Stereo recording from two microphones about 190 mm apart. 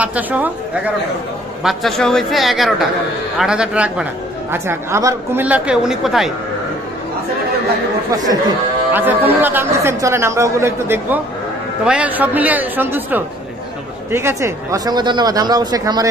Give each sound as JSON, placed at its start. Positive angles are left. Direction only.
{"t": 0.0, "sound": "a man's voice", "side_deg": -10}
{"t": 8.1, "sound": "speech", "side_deg": -20}